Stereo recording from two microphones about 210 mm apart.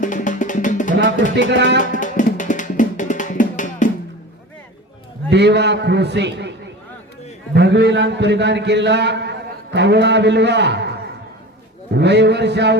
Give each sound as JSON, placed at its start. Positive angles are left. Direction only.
{"t": 0.0, "sound": "music", "side_deg": 35}
{"t": 1.0, "sound": "speech", "side_deg": 35}
{"t": 1.4, "sound": "a man's voice", "side_deg": -55}
{"t": 1.8, "sound": "music", "side_deg": 35}
{"t": 5.3, "sound": "a man's voice", "side_deg": -55}
{"t": 7.5, "sound": "a man's voice", "side_deg": -55}
{"t": 11.9, "sound": "a man's voice", "side_deg": -55}